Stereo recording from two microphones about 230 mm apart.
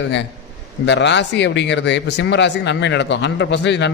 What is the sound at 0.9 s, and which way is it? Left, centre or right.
Speech, left.